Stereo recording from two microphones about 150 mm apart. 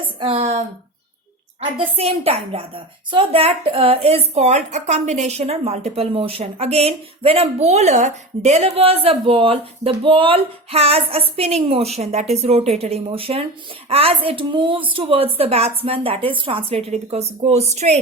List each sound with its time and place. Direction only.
0.2 s speech: 40° right (ahead or behind)
1.7 s a woman's voice: 35° right (ahead or behind)